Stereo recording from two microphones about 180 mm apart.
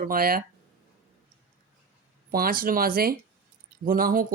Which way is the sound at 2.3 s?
55° right (ahead or behind).